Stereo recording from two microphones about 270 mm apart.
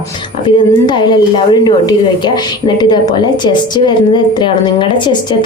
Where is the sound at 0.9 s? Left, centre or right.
Centre.